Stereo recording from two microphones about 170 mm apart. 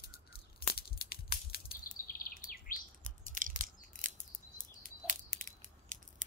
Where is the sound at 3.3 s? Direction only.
50° right (ahead or behind).